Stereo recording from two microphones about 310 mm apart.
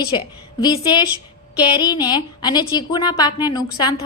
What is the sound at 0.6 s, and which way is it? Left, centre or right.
A woman's voice, centre.